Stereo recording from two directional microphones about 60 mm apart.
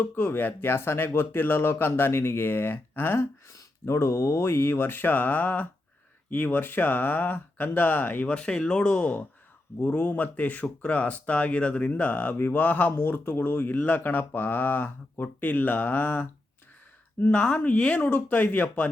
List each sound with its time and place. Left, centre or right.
0.0 s speech: left
8.3 s speech: centre
17.3 s speech: left